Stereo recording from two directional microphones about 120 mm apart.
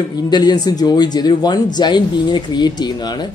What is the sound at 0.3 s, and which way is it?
A woman's voice, 35° left (ahead or behind).